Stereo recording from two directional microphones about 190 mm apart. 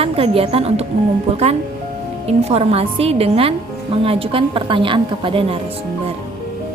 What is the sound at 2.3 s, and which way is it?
A woman's voice, 30° right (ahead or behind).